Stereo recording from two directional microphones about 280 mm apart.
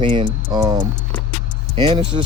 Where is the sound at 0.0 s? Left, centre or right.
Centre.